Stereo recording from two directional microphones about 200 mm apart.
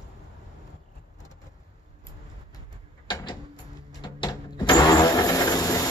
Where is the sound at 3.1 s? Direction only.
20° left (ahead or behind).